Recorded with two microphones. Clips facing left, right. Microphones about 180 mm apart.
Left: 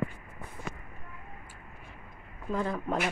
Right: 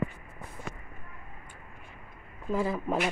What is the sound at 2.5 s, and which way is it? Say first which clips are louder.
Speech: right 2 dB; 5° right (ahead or behind).